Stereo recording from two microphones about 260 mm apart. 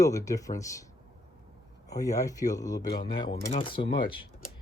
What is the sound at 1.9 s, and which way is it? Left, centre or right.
Speech, centre.